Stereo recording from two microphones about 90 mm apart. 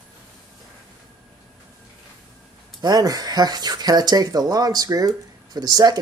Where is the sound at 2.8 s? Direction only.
45° right (ahead or behind).